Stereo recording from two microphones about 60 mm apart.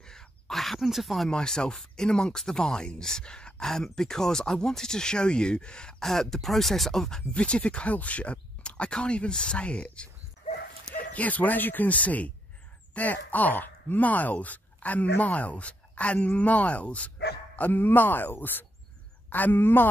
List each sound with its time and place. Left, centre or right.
0.0 s a sound: centre
1.3 s speech: centre
17.6 s speech: left